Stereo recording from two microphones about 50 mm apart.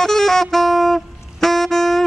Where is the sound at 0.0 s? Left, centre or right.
Centre.